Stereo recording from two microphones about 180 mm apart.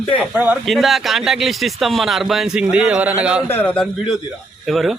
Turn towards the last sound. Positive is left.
turn(degrees=0)  # may be behind; listen again after turning